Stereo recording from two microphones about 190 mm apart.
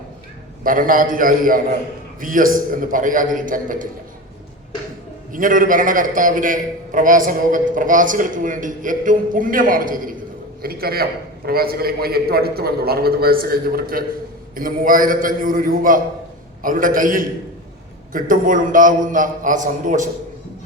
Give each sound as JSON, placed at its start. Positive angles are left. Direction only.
{"t": 0.6, "sound": "a man's voice", "side_deg": -45}
{"t": 5.3, "sound": "a man's voice", "side_deg": -45}